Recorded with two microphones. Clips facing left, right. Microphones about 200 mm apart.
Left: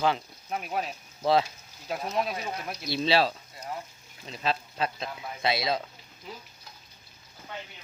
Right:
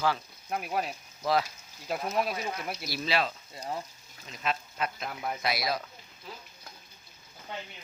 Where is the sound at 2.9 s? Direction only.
25° left (ahead or behind).